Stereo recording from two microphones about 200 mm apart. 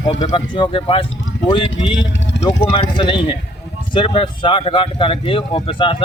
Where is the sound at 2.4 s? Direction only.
25° left (ahead or behind).